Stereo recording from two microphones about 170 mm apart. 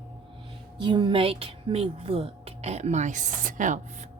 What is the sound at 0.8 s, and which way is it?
Speech, 25° right (ahead or behind).